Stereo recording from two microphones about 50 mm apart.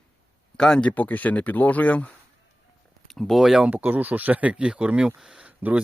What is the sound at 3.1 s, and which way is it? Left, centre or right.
Speech, centre.